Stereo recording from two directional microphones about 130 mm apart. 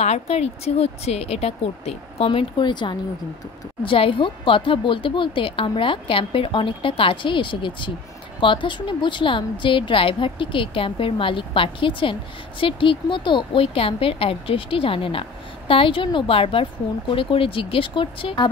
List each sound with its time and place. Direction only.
0.0 s a woman's voice: 60° left (ahead or behind); by 18.5 s 40° left (ahead or behind)